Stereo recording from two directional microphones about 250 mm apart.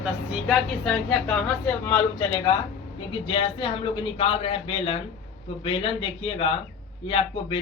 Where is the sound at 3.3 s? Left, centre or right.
Centre.